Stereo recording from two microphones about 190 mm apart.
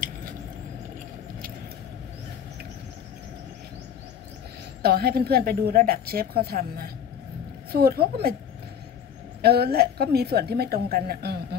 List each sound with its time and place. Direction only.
4.8 s a woman's voice: 55° right (ahead or behind)
9.4 s a woman's voice: 55° right (ahead or behind)